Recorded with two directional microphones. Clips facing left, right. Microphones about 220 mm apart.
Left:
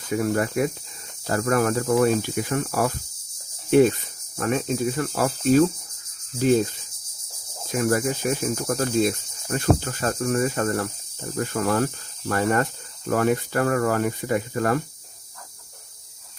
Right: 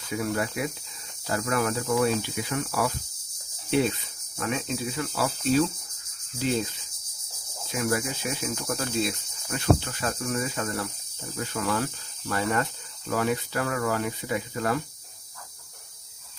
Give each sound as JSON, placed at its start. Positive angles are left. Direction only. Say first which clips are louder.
{"t": 0.1, "sound": "speech", "louder": "left 5 dB", "side_deg": 50}